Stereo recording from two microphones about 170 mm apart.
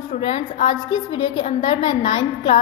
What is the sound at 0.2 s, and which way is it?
A woman's voice, 30° left (ahead or behind).